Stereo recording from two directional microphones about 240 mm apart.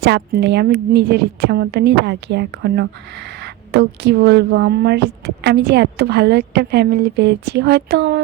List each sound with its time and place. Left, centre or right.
0.0 s speech: right